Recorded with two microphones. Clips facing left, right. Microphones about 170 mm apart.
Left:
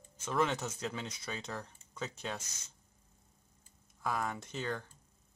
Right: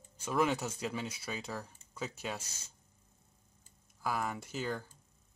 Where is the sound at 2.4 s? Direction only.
30° right (ahead or behind).